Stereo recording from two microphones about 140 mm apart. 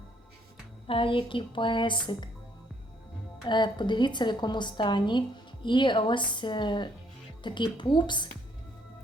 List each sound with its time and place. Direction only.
0.9 s a woman's voice: 40° left (ahead or behind)
3.5 s a woman's voice: 35° left (ahead or behind)